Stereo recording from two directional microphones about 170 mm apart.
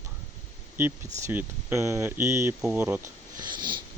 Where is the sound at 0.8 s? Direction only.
10° right (ahead or behind).